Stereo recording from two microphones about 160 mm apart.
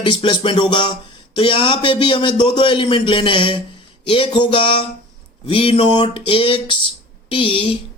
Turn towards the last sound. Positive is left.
turn(degrees=35)  # may be behind; listen again after turning